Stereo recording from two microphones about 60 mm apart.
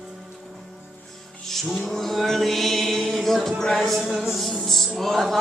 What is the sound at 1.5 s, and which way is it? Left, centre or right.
Music, centre.